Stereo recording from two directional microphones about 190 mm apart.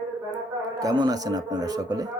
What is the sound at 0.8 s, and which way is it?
Speech, 20° right (ahead or behind).